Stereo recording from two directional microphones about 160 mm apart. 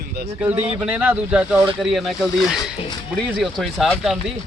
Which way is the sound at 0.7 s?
10° right (ahead or behind).